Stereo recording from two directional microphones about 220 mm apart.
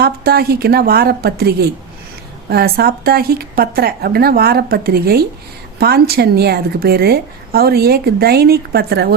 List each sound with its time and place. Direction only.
0.0 s a woman's voice: 45° right (ahead or behind)